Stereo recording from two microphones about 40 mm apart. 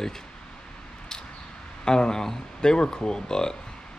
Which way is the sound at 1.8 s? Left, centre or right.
Centre.